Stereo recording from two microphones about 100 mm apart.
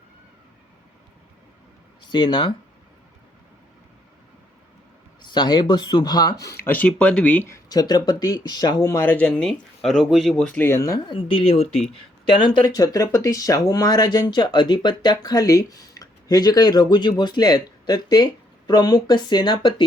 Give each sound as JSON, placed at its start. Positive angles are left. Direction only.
{"t": 2.0, "sound": "speech", "side_deg": 50}
{"t": 5.2, "sound": "speech", "side_deg": 45}
{"t": 6.7, "sound": "speech", "side_deg": 15}
{"t": 7.5, "sound": "speech", "side_deg": 40}
{"t": 9.1, "sound": "speech", "side_deg": 10}
{"t": 10.6, "sound": "speech", "side_deg": 25}
{"t": 11.0, "sound": "speech", "side_deg": 60}
{"t": 11.9, "sound": "speech", "side_deg": 55}